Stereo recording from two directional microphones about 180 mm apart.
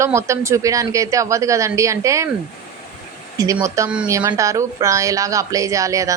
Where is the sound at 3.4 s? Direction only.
15° right (ahead or behind).